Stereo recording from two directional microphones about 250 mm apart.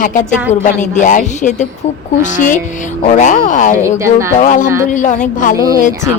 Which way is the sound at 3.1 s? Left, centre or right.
Left.